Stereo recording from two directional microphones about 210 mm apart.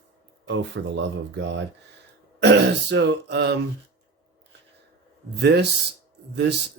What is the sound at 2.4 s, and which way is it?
Speech, 55° right (ahead or behind).